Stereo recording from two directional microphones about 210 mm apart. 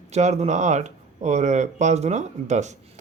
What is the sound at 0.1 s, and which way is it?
Speech, 35° right (ahead or behind).